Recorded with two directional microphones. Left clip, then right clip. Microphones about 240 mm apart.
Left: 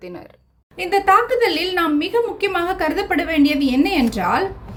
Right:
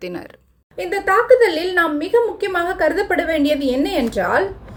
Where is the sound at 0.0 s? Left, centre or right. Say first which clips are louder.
Right 5 dB; centre.